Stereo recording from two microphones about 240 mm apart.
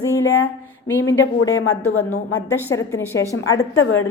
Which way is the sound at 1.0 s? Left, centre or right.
Left.